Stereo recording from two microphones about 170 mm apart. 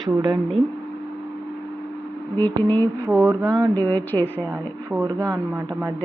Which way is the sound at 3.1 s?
10° right (ahead or behind).